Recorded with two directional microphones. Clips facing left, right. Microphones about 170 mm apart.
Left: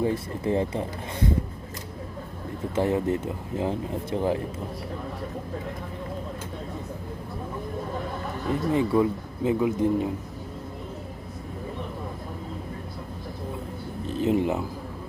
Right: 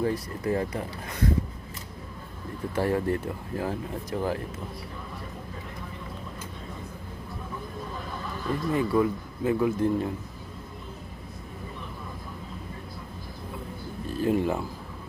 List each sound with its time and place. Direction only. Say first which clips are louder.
0.0 s speech: left 2 dB; 25° left (ahead or behind)
2.7 s speech: left 2 dB; 20° left (ahead or behind)
8.4 s speech: left 3 dB; 25° left (ahead or behind)
14.1 s speech: left 2 dB; 20° left (ahead or behind)